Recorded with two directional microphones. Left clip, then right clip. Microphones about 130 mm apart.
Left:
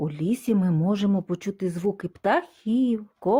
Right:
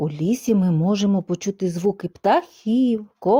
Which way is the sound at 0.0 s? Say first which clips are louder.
Right 4 dB; 45° right (ahead or behind).